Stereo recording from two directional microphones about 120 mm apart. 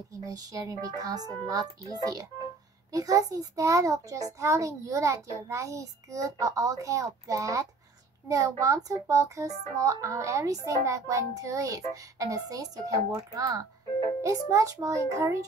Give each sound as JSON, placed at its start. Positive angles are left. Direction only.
{"t": 0.1, "sound": "a child's voice", "side_deg": -30}